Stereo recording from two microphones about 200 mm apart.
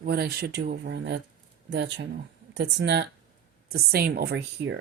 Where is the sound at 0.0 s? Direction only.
50° right (ahead or behind).